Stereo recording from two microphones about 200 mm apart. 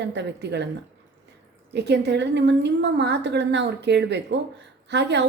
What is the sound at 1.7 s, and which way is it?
A woman's voice, 55° right (ahead or behind).